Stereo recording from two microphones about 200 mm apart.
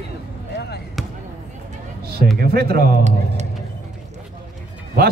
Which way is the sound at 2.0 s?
50° right (ahead or behind).